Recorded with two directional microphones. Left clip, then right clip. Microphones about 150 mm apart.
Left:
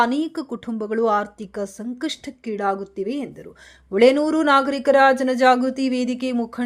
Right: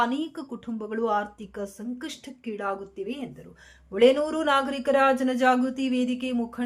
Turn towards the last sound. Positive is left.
turn(degrees=40)  # may be behind; listen again after turning